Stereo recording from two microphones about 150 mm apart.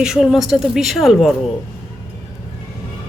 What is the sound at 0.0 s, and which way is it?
Speech, 5° right (ahead or behind).